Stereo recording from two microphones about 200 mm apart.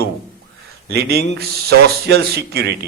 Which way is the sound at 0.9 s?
50° right (ahead or behind).